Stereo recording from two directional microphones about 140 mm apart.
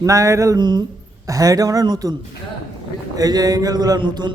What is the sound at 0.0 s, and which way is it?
Speech, 20° right (ahead or behind).